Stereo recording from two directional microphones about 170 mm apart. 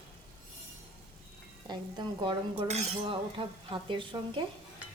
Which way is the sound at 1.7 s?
25° right (ahead or behind).